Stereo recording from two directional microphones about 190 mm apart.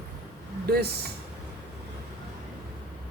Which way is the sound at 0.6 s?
55° right (ahead or behind).